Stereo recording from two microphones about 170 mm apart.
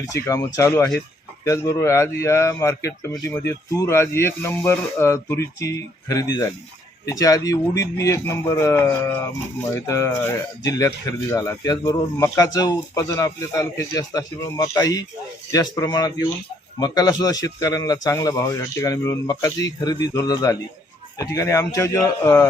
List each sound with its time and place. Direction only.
0.0 s a man's voice: 20° left (ahead or behind)